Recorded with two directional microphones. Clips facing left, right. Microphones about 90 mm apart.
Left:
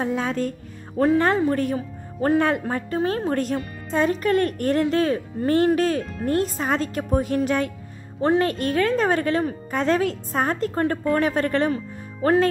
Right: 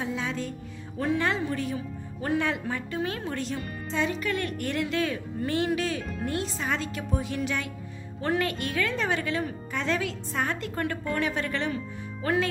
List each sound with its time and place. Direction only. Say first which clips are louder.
0.0 s a woman's voice: left 7 dB; 50° left (ahead or behind)
8.2 s a woman's voice: left 7 dB; 35° left (ahead or behind)